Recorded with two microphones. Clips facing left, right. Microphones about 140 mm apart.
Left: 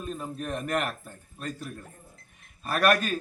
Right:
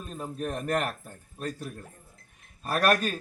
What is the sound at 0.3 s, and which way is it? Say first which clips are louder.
Speech: right 2 dB; 40° right (ahead or behind).